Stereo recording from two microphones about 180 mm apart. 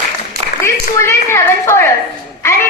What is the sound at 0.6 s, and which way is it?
A woman's voice, 15° left (ahead or behind).